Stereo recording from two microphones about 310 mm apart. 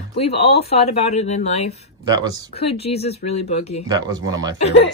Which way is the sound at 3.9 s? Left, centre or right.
Centre.